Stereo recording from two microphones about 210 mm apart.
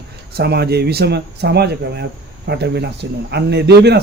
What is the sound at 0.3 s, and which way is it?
Speech, 50° right (ahead or behind).